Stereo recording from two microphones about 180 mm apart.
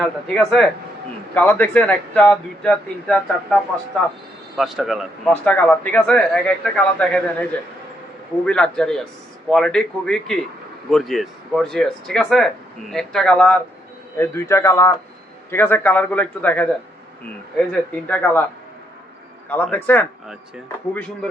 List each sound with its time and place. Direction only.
0.0 s a man's voice: 5° left (ahead or behind)
8.4 s speech: 5° left (ahead or behind)
14.2 s a man's voice: 15° left (ahead or behind)
19.6 s a man's voice: 10° left (ahead or behind)